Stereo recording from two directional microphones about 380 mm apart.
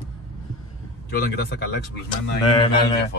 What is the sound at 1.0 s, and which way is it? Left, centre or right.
Speech, left.